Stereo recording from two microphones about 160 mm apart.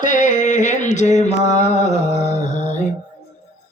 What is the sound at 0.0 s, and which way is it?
Mantra, 55° left (ahead or behind).